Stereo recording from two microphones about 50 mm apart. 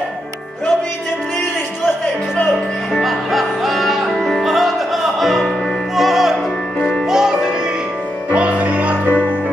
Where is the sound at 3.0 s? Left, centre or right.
Centre.